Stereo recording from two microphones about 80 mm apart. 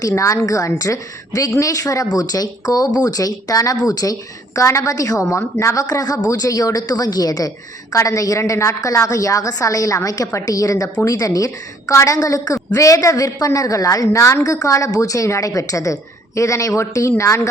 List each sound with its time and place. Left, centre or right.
0.1 s a woman's voice: left